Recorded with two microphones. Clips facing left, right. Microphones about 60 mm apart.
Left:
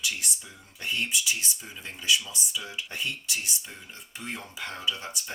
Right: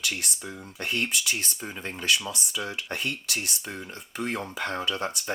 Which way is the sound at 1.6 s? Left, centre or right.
Right.